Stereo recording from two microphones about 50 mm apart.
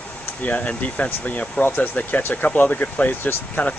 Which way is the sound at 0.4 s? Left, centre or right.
Left.